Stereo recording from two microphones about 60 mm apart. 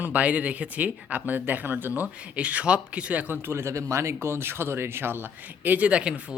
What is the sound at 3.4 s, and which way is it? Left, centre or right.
Speech, right.